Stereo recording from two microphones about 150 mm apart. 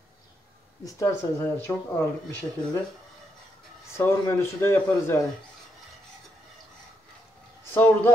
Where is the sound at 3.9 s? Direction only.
15° left (ahead or behind).